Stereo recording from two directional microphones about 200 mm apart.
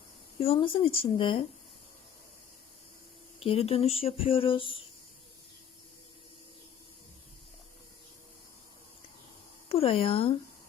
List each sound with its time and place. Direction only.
0.3 s speech: 30° left (ahead or behind)
3.4 s speech: 30° left (ahead or behind)
9.6 s speech: 30° left (ahead or behind)